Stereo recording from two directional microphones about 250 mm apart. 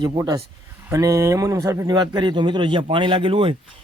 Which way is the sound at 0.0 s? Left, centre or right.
Centre.